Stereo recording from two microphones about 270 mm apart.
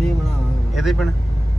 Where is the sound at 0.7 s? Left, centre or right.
Centre.